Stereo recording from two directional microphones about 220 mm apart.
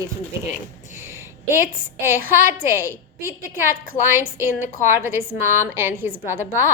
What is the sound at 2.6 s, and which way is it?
A woman's voice, 10° right (ahead or behind).